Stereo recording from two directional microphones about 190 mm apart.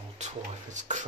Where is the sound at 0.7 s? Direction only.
40° right (ahead or behind).